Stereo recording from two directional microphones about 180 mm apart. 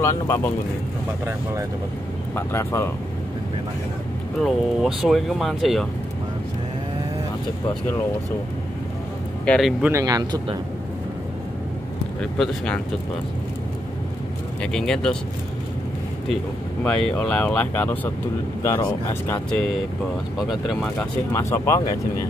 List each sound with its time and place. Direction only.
0.0 s speech: 15° left (ahead or behind)
1.2 s speech: 15° right (ahead or behind)
2.3 s speech: 15° left (ahead or behind)
4.4 s speech: centre (ahead or behind)
9.5 s speech: centre (ahead or behind); by 10.6 s 20° right (ahead or behind)
12.2 s speech: 5° left (ahead or behind)
14.6 s speech: 5° left (ahead or behind)
16.8 s speech: 5° left (ahead or behind)
20.3 s speech: centre (ahead or behind); by 22.2 s 15° left (ahead or behind)